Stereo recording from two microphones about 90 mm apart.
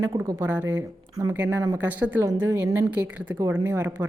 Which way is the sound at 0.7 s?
40° right (ahead or behind).